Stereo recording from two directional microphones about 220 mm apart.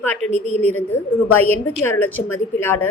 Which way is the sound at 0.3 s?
30° right (ahead or behind).